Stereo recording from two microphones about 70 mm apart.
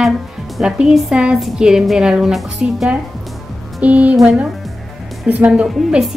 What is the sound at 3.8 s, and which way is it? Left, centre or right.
Speech, centre.